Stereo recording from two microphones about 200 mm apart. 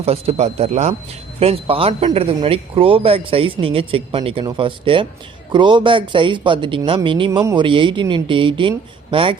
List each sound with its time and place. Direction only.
0.0 s speech: 30° right (ahead or behind)